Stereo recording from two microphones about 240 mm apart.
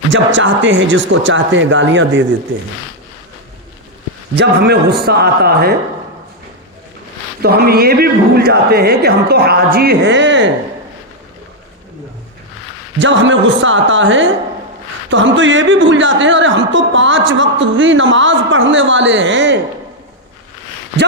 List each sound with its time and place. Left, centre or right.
0.1 s speech: right
4.4 s a man's voice: right
7.4 s a man's voice: right
13.0 s speech: right